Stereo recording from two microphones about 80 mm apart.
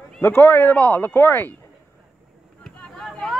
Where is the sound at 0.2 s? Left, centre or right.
Left.